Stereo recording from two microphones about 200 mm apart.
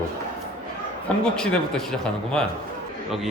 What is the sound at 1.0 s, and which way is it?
A man's voice, 5° left (ahead or behind).